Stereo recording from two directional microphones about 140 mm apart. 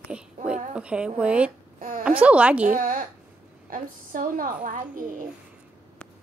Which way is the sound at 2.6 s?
75° right (ahead or behind).